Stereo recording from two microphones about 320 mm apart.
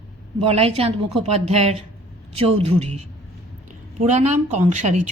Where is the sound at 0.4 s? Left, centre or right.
Centre.